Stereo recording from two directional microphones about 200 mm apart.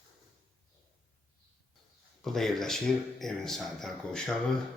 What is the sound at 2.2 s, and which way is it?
Speech, centre (ahead or behind).